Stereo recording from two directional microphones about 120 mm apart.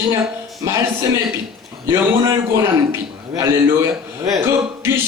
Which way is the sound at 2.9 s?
25° right (ahead or behind).